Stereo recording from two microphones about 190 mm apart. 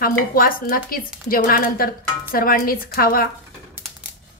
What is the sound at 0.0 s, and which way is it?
A woman's voice, 50° left (ahead or behind).